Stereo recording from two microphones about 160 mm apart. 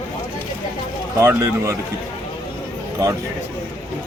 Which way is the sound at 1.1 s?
15° right (ahead or behind).